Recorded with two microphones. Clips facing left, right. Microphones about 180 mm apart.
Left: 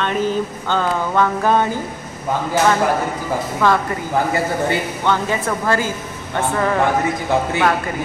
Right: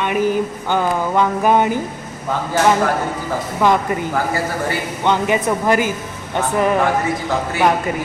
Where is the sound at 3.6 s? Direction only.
15° right (ahead or behind).